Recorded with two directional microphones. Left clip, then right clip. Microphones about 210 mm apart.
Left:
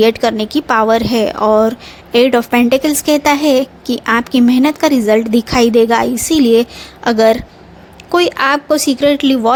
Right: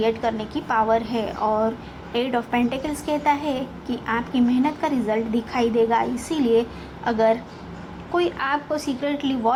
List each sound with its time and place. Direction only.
0.0 s a woman's voice: 65° left (ahead or behind)